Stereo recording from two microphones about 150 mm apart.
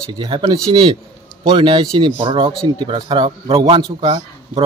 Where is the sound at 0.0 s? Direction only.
30° right (ahead or behind).